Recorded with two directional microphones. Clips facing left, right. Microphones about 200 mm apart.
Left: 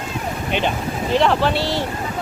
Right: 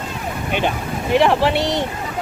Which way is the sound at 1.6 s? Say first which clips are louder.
Right 2 dB; 20° right (ahead or behind).